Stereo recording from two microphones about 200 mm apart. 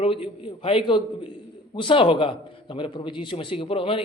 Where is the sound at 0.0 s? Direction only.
30° left (ahead or behind).